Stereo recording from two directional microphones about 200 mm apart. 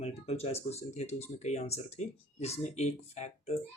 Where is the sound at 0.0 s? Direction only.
30° left (ahead or behind).